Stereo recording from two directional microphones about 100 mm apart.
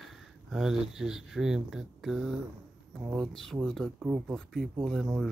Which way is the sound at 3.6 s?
5° left (ahead or behind).